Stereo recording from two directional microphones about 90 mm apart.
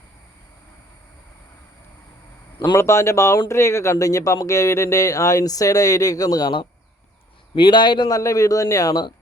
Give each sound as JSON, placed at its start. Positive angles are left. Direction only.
{"t": 2.7, "sound": "a man's voice", "side_deg": 30}
{"t": 8.1, "sound": "speech", "side_deg": 40}